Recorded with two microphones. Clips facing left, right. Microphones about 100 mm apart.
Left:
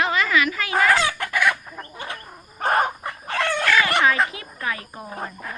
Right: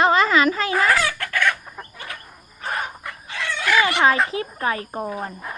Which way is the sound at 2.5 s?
55° left (ahead or behind).